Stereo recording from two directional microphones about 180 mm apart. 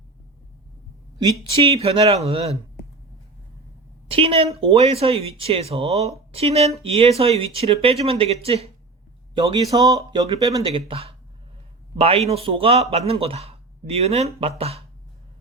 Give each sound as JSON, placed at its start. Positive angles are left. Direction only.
{"t": 1.2, "sound": "speech", "side_deg": -30}
{"t": 4.1, "sound": "speech", "side_deg": -30}